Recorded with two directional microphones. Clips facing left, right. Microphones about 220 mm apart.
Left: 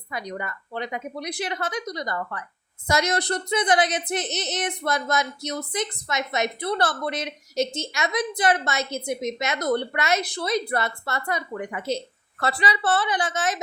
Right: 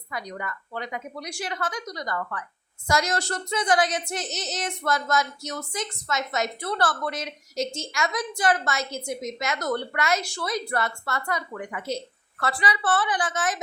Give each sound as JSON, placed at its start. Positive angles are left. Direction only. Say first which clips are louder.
{"t": 0.1, "sound": "a woman's voice", "louder": "left 2 dB", "side_deg": 20}